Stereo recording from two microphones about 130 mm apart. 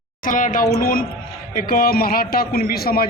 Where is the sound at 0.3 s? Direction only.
90° left.